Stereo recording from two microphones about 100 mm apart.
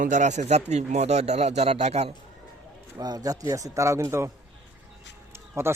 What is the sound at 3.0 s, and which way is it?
Speech, 40° right (ahead or behind).